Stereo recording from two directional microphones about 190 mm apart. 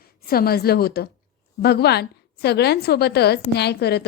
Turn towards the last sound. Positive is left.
turn(degrees=60)  # may be behind; listen again after turning